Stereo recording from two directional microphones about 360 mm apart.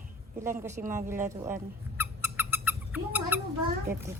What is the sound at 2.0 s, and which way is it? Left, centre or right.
Squeak, centre.